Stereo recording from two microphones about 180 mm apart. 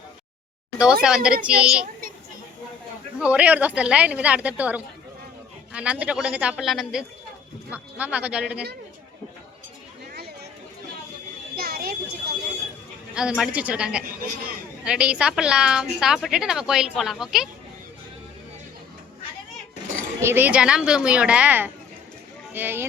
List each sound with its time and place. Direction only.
1.0 s a woman's voice: 5° right (ahead or behind)
1.8 s a sound: 50° right (ahead or behind)
3.2 s a woman's voice: 5° right (ahead or behind)
11.5 s a sound: 55° right (ahead or behind)
13.1 s a woman's voice: 5° right (ahead or behind)
20.2 s a woman's voice: 10° right (ahead or behind)